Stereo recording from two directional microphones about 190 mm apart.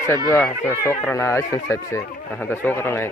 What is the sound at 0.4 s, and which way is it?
Speech, 10° left (ahead or behind).